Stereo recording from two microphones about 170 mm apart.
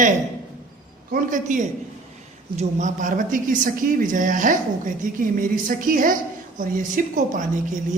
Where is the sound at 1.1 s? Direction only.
50° right (ahead or behind).